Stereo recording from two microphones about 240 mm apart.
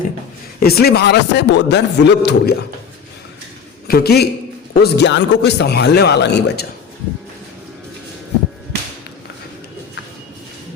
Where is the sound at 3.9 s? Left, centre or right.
Left.